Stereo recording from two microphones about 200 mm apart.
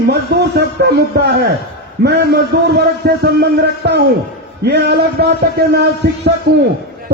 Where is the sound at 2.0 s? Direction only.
55° right (ahead or behind).